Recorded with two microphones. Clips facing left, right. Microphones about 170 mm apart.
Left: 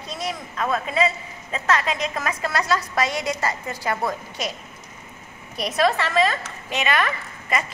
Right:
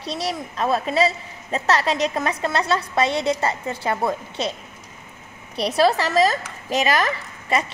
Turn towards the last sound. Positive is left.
turn(degrees=-35)  # may be behind; listen again after turning